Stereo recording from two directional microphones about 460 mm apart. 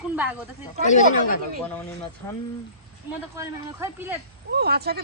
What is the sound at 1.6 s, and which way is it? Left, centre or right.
Speech, centre.